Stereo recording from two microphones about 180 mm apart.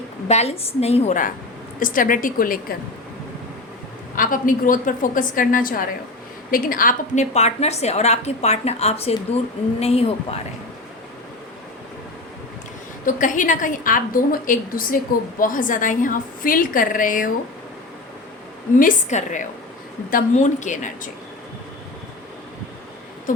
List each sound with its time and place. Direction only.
0.3 s a woman's voice: 35° left (ahead or behind); by 2.7 s 50° left (ahead or behind)
4.1 s a woman's voice: 50° left (ahead or behind)
13.1 s a woman's voice: 45° left (ahead or behind)
18.8 s a woman's voice: 45° left (ahead or behind)